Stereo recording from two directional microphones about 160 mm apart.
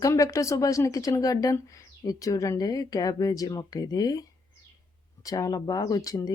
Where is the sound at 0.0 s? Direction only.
20° left (ahead or behind).